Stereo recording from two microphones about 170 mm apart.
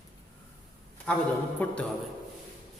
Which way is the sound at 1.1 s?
5° left (ahead or behind).